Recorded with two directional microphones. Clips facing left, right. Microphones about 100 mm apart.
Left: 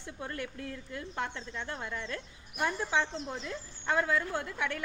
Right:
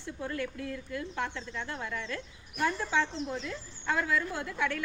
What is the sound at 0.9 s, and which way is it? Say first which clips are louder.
A woman's voice: right 1 dB; 30° left (ahead or behind).